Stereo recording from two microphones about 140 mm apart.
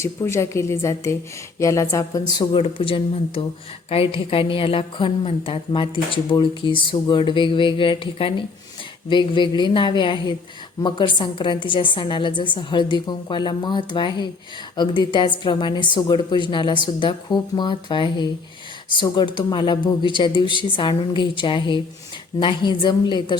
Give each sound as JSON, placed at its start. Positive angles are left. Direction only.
{"t": 0.0, "sound": "a woman's voice", "side_deg": 20}